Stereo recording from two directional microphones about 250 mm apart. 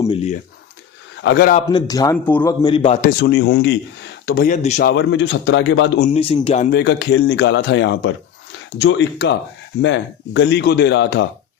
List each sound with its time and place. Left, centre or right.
0.0 s speech: left
1.1 s a sound: left
1.7 s a man's voice: centre
3.0 s speech: left
4.9 s speech: left
6.0 s speech: left
6.7 s speech: left